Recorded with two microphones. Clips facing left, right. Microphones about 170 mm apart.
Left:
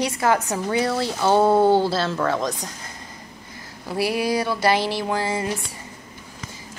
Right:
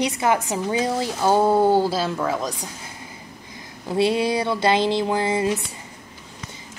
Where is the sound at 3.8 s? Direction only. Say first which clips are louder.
Right 3 dB; 25° right (ahead or behind).